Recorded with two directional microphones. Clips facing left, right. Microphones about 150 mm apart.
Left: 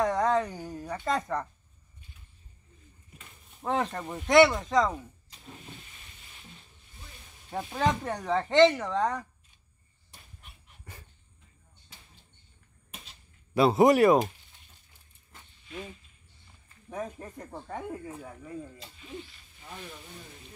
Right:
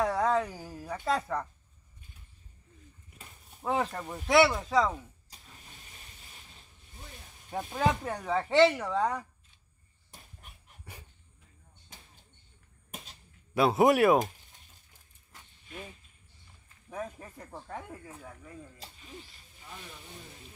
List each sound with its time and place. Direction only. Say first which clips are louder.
0.0 s speech: left 2 dB; 5° right (ahead or behind)
3.6 s speech: left 1 dB; 5° right (ahead or behind)
7.4 s speech: left 1 dB; centre (ahead or behind)
10.4 s dog: right 1 dB; 45° right (ahead or behind)
10.9 s dog: even; 10° right (ahead or behind)
11.9 s arrow: right 2 dB; 45° right (ahead or behind)
13.6 s speech: left 3 dB; centre (ahead or behind)
16.9 s speech: left 3 dB; centre (ahead or behind)